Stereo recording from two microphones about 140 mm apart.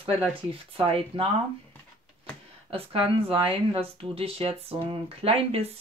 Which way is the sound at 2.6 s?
40° right (ahead or behind).